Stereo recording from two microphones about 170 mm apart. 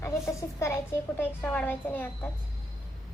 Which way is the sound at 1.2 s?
10° left (ahead or behind).